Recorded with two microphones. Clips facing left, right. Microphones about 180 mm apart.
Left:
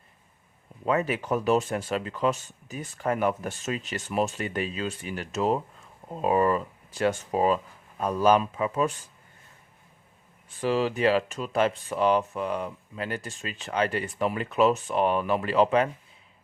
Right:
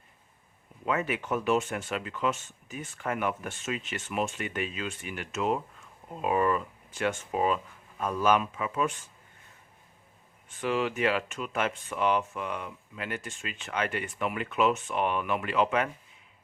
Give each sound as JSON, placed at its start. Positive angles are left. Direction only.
{"t": 0.9, "sound": "speech", "side_deg": 35}
{"t": 10.6, "sound": "speech", "side_deg": 35}